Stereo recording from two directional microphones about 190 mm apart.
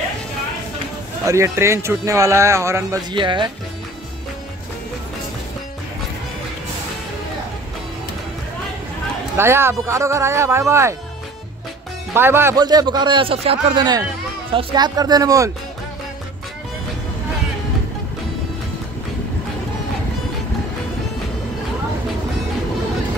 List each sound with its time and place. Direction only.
1.2 s speech: 15° right (ahead or behind)
9.4 s speech: 15° right (ahead or behind)
12.1 s a man's voice: 10° right (ahead or behind)